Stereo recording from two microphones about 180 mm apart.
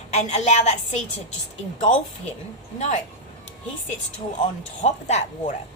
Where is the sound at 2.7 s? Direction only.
40° left (ahead or behind).